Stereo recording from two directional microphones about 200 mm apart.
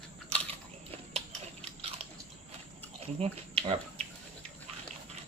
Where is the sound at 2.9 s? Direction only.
30° right (ahead or behind).